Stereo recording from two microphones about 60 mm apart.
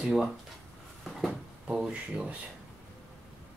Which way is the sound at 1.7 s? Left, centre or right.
Centre.